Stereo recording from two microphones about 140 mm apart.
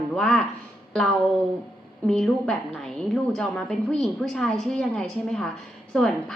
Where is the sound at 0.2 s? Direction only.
Centre (ahead or behind).